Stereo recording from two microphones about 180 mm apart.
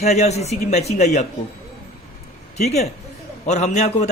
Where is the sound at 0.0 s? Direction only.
40° left (ahead or behind).